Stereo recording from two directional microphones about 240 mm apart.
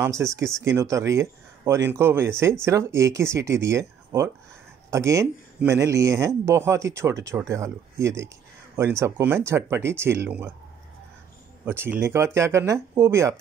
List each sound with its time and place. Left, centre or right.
0.0 s speech: centre
11.6 s speech: centre